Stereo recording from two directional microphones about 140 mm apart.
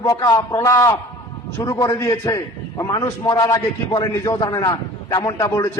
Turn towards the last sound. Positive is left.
turn(degrees=20)  # may be behind; listen again after turning